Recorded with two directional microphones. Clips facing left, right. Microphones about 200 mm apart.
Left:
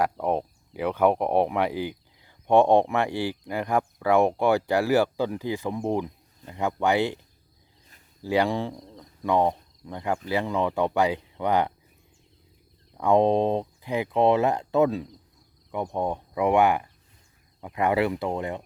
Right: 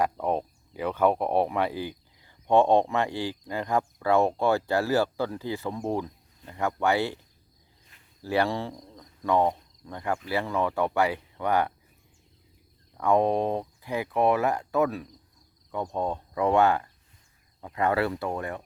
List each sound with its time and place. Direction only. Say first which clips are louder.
0.0 s speech: left 1 dB; 10° left (ahead or behind)
8.2 s speech: left 2 dB; 15° left (ahead or behind)
13.0 s speech: left 3 dB; 20° left (ahead or behind)